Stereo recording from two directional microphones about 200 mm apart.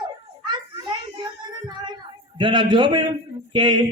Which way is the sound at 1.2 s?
20° right (ahead or behind).